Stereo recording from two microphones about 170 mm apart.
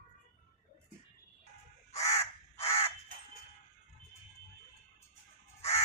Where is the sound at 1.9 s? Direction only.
40° left (ahead or behind).